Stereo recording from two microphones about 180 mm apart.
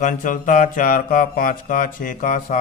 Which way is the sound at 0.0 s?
45° left (ahead or behind).